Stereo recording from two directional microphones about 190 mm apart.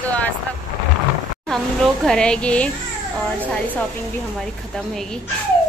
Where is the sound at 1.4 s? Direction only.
Centre (ahead or behind).